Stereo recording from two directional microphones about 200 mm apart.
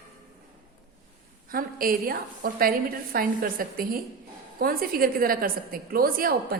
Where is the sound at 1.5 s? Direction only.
45° right (ahead or behind).